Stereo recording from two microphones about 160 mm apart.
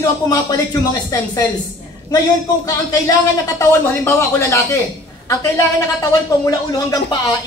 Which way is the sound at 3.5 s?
15° left (ahead or behind).